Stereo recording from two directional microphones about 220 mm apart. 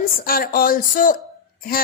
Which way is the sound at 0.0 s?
40° left (ahead or behind).